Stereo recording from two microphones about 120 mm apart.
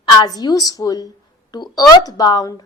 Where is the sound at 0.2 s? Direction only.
35° left (ahead or behind).